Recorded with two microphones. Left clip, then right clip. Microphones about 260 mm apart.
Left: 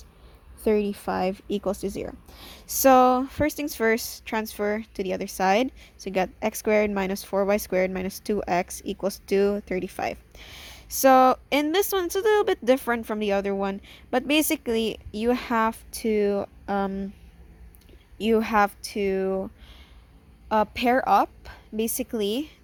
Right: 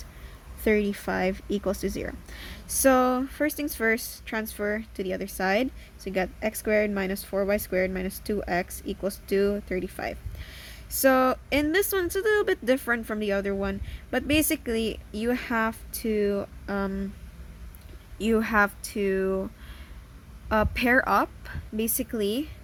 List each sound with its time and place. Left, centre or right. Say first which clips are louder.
0.6 s speech: left 1 dB; centre
18.2 s speech: left 2 dB; centre
20.5 s a woman's voice: left 1 dB; centre